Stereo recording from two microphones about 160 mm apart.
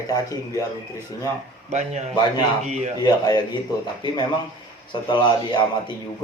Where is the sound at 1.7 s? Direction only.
45° right (ahead or behind).